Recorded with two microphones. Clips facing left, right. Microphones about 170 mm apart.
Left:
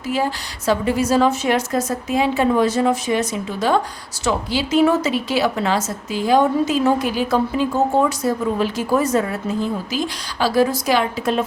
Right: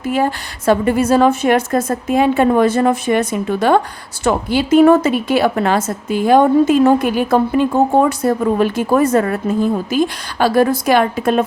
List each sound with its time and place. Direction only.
0.0 s a woman's voice: 55° right (ahead or behind)